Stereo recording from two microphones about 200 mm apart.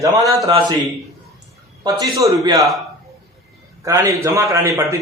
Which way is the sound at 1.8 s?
15° right (ahead or behind).